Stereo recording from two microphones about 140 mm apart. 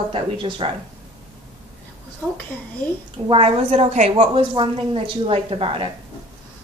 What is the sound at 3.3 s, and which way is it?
A woman's voice, 45° right (ahead or behind).